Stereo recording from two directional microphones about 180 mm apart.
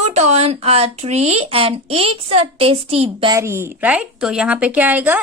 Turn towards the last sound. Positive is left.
turn(degrees=-10)  # may be behind; listen again after turning